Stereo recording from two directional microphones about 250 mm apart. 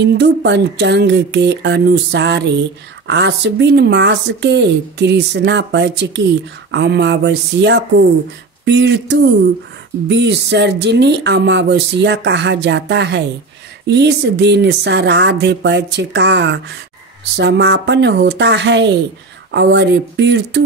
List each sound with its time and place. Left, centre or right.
0.0 s speech: right